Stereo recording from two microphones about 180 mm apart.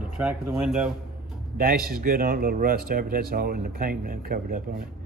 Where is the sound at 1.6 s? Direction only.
55° right (ahead or behind).